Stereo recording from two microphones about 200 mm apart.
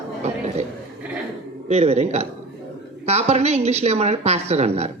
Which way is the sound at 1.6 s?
30° right (ahead or behind).